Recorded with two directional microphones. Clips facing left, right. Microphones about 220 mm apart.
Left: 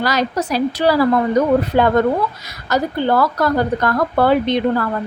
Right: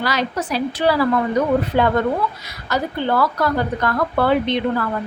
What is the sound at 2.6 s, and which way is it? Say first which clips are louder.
A woman's voice: left 4 dB; 40° left (ahead or behind).